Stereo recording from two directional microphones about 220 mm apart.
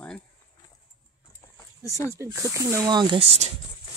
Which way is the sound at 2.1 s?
15° right (ahead or behind).